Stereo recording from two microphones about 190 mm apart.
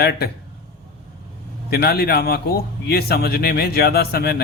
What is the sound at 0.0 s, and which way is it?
Speech, 55° left (ahead or behind).